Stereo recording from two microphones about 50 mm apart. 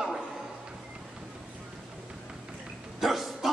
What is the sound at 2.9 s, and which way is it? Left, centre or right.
Hiccup, centre.